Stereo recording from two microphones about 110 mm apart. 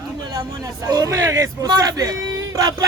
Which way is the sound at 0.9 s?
30° right (ahead or behind).